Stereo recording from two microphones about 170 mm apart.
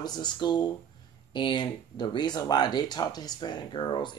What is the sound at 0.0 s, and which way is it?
Speech, 25° left (ahead or behind).